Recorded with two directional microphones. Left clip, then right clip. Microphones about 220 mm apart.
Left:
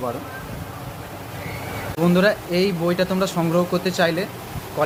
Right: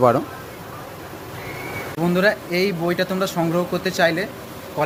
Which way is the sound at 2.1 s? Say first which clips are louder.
Right 1 dB; 10° left (ahead or behind).